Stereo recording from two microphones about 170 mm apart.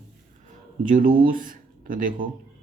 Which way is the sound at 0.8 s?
55° right (ahead or behind).